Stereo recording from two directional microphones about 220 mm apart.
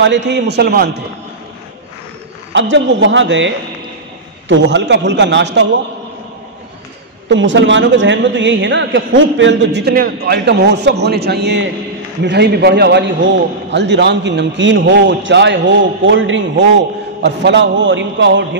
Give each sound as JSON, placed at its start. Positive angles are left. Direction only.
{"t": 0.0, "sound": "a man's voice", "side_deg": -55}
{"t": 2.5, "sound": "a man's voice", "side_deg": -55}
{"t": 7.2, "sound": "a man's voice", "side_deg": -55}